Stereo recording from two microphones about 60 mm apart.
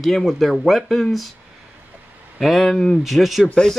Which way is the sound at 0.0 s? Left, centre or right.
Centre.